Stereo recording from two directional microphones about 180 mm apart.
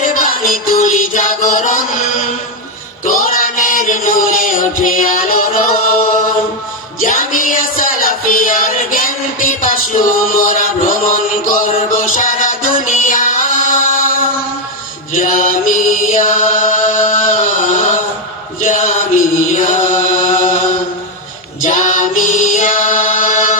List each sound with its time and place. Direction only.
0.1 s music: 50° left (ahead or behind)
7.0 s a sound: 45° left (ahead or behind)
15.1 s mantra: 45° left (ahead or behind)
18.6 s chant: 40° left (ahead or behind)
21.6 s music: 45° left (ahead or behind)